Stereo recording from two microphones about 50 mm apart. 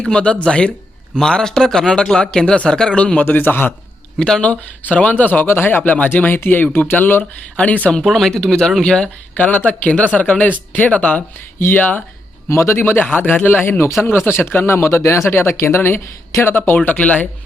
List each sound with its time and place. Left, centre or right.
0.0 s speech: centre
3.2 s speech: left
4.2 s speech: centre
4.9 s speech: left
8.0 s speech: centre
9.3 s speech: left
11.7 s speech: left
12.5 s speech: left
14.0 s speech: left
14.8 s speech: left